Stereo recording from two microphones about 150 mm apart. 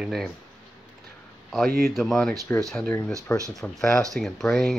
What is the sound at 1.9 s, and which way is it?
Speech, centre (ahead or behind).